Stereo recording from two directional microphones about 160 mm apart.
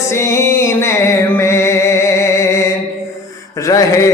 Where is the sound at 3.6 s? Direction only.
20° left (ahead or behind).